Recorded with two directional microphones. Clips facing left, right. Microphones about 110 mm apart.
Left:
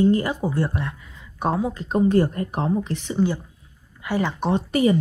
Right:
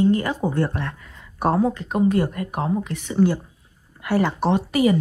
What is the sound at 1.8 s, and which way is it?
Speech, 30° left (ahead or behind).